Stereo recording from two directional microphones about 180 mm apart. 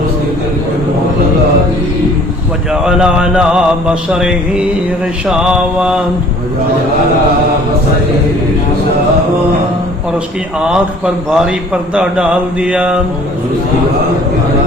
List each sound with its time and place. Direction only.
2.8 s music: 5° right (ahead or behind)
10.6 s a man's voice: 5° right (ahead or behind)